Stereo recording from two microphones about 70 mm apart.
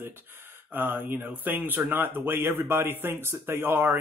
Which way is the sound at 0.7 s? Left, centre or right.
Right.